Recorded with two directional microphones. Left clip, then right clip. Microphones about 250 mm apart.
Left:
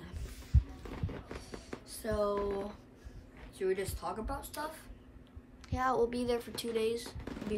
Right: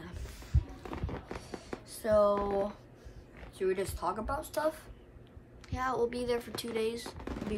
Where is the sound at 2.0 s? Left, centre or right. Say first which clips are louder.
Right 7 dB; centre.